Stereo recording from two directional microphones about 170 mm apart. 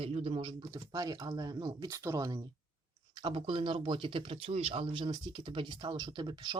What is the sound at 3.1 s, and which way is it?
Speech, 30° right (ahead or behind).